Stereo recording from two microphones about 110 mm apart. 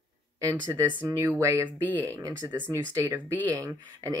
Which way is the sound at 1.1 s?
25° right (ahead or behind).